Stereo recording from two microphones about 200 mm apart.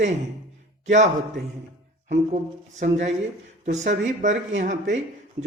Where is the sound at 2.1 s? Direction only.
35° right (ahead or behind).